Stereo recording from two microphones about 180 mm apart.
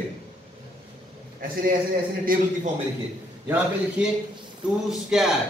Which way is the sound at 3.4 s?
5° right (ahead or behind).